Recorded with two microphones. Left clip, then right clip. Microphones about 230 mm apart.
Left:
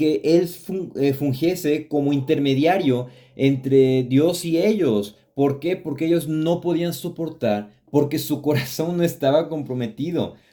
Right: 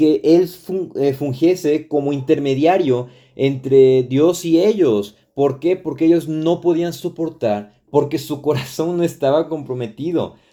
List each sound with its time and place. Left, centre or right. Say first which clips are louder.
0.3 s speech: right 5 dB; right